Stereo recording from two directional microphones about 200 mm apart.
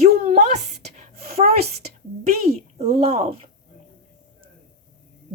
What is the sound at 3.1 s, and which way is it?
Speech, 30° right (ahead or behind).